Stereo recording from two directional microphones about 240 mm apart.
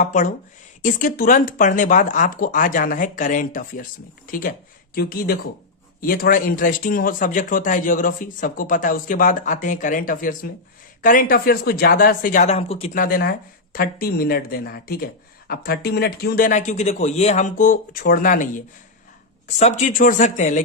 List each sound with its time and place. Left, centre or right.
0.0 s speech: left